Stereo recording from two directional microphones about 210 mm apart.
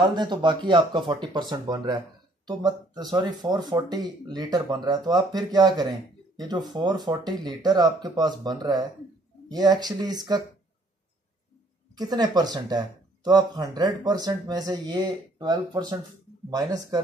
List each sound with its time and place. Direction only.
0.0 s speech: 20° right (ahead or behind)
12.0 s speech: 20° right (ahead or behind)